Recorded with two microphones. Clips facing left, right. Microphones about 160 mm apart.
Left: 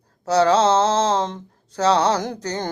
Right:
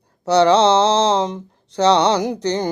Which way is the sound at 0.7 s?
15° right (ahead or behind).